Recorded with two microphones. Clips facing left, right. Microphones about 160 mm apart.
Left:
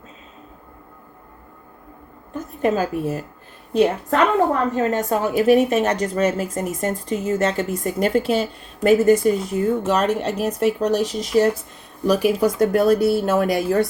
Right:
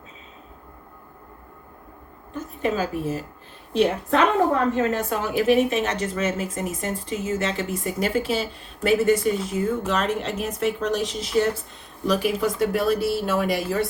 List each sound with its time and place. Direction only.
2.6 s a woman's voice: 50° left (ahead or behind)